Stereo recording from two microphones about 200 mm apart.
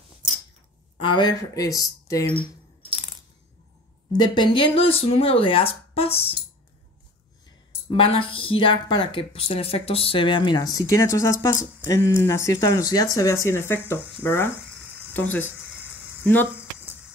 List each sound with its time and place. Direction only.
0.9 s speech: 25° left (ahead or behind)
4.1 s speech: 20° left (ahead or behind)
7.9 s speech: 25° left (ahead or behind); by 14.5 s 10° left (ahead or behind)
14.9 s a sound: 10° left (ahead or behind)
15.7 s a sound: 5° right (ahead or behind)
16.3 s speech: 10° left (ahead or behind)